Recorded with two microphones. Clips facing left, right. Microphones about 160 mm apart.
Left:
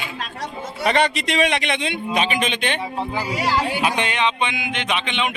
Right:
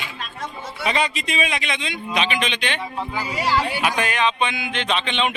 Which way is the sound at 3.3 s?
15° left (ahead or behind).